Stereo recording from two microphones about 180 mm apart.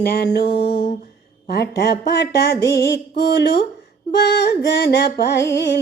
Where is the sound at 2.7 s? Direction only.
65° left (ahead or behind).